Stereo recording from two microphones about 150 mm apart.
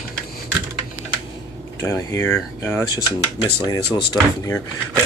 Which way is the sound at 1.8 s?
20° left (ahead or behind).